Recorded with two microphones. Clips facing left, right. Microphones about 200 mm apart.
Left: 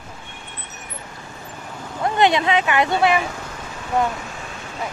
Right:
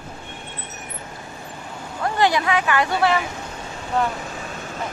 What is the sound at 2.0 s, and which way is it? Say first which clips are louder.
Speech: left 2 dB; 20° left (ahead or behind).